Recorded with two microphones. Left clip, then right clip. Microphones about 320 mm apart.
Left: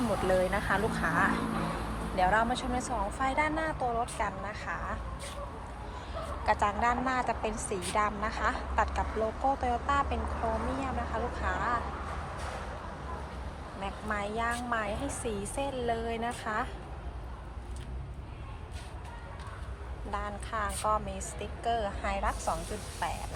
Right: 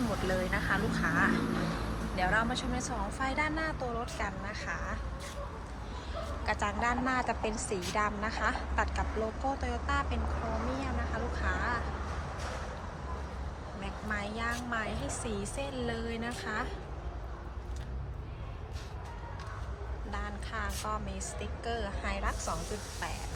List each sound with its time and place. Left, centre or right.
0.3 s speech: centre
1.4 s a sound: centre
2.1 s speech: centre
6.4 s speech: centre
10.6 s speech: centre
11.1 s speech: centre
13.8 s speech: centre
20.1 s speech: centre